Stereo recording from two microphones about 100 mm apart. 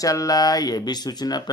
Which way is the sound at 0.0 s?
35° left (ahead or behind).